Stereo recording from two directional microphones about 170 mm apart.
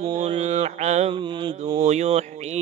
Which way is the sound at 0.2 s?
40° right (ahead or behind).